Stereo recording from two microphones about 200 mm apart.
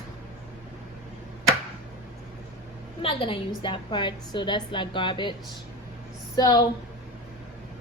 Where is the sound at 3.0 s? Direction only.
25° left (ahead or behind).